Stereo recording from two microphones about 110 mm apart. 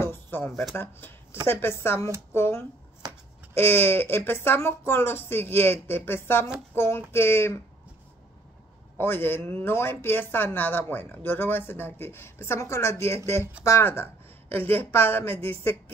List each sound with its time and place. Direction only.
0.0 s a sound: 20° left (ahead or behind)
0.7 s speech: 20° left (ahead or behind)
8.9 s a woman's voice: 20° left (ahead or behind)